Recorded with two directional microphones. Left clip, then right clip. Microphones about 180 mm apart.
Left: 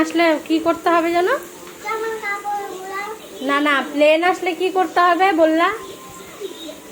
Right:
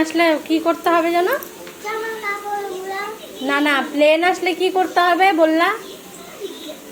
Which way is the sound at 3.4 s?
Centre (ahead or behind).